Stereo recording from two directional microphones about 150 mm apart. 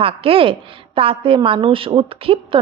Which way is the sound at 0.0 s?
40° right (ahead or behind).